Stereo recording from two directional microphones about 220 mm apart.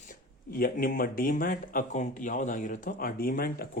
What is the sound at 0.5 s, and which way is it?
Speech, 40° left (ahead or behind).